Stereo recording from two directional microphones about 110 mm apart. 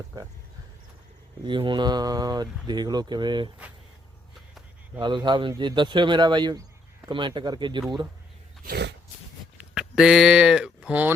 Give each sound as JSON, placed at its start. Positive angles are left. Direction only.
{"t": 1.5, "sound": "speech", "side_deg": -45}
{"t": 4.9, "sound": "speech", "side_deg": -45}
{"t": 7.1, "sound": "speech", "side_deg": -45}
{"t": 9.6, "sound": "speech", "side_deg": -5}